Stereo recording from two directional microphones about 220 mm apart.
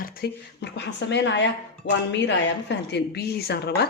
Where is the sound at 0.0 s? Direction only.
45° left (ahead or behind).